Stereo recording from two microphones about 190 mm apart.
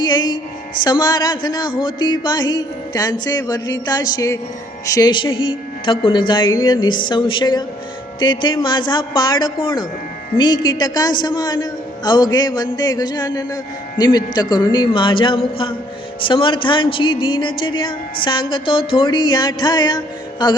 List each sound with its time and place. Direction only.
0.0 s music: 20° left (ahead or behind)
0.9 s a woman's voice: 20° left (ahead or behind)